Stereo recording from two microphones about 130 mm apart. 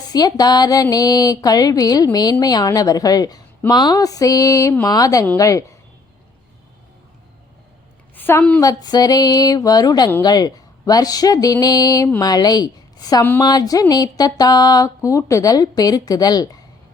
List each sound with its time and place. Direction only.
0.1 s speech: 30° left (ahead or behind)
8.1 s a woman's voice: 15° left (ahead or behind)
8.6 s a woman's voice: 30° left (ahead or behind)